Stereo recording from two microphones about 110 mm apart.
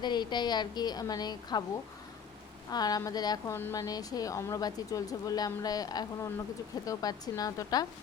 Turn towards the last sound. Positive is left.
turn(degrees=35)  # may be behind; listen again after turning